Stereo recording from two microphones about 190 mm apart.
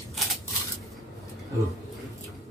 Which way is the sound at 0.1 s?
Centre (ahead or behind).